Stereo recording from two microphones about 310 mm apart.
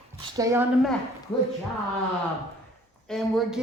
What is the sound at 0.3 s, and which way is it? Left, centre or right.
Speech, centre.